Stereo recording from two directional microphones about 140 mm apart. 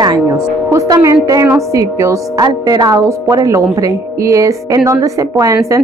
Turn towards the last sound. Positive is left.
turn(degrees=-25)  # may be behind; listen again after turning